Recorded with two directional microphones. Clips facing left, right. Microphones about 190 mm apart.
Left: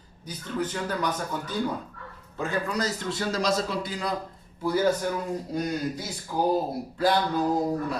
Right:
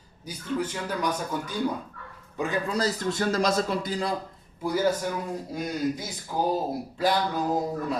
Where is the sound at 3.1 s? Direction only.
50° right (ahead or behind).